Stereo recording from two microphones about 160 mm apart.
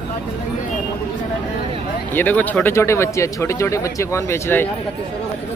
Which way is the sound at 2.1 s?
10° left (ahead or behind).